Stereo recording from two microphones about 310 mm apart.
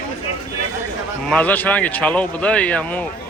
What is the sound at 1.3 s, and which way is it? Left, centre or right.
Speech, centre.